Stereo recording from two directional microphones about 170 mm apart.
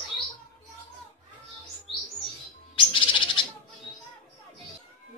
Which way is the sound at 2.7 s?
30° left (ahead or behind).